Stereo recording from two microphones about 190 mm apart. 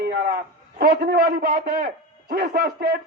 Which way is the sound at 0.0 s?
55° right (ahead or behind).